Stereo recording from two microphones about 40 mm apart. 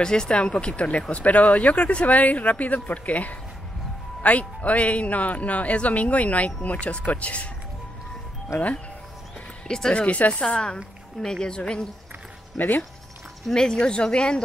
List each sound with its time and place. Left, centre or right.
0.0 s speech: centre
9.7 s speech: centre
10.0 s speech: left
10.3 s speech: left
12.5 s speech: left
13.5 s speech: centre